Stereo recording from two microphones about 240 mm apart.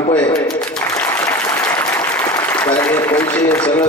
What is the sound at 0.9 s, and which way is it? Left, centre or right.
Applause, centre.